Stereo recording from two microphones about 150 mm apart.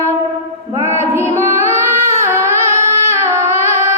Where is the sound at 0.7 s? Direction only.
20° right (ahead or behind).